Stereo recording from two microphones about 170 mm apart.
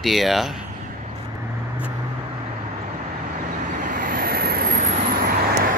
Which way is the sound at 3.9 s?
55° right (ahead or behind).